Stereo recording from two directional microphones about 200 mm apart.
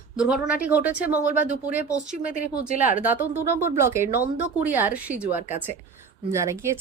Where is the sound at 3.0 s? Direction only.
10° right (ahead or behind).